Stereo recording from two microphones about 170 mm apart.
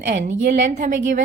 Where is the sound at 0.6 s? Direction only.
50° right (ahead or behind).